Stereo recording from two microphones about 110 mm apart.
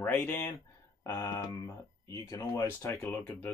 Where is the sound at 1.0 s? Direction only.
35° left (ahead or behind).